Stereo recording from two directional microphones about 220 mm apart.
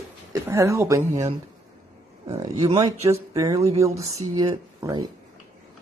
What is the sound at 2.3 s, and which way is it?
Speech, 15° right (ahead or behind).